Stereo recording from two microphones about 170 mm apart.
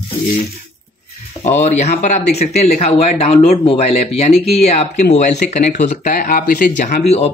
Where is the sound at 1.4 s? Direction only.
40° left (ahead or behind).